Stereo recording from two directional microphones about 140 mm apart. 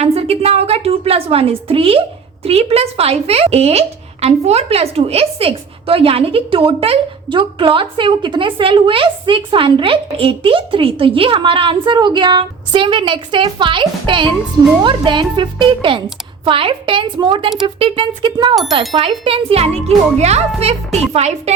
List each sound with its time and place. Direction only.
0.0 s a woman's voice: 45° right (ahead or behind)